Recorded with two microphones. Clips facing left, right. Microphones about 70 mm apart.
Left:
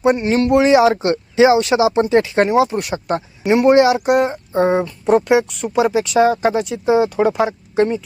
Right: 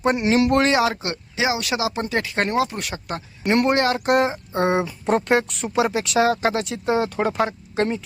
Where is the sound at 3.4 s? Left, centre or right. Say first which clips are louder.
Left 7 dB; centre.